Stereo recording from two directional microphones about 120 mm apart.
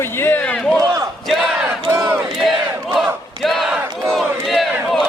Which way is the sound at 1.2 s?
Centre (ahead or behind).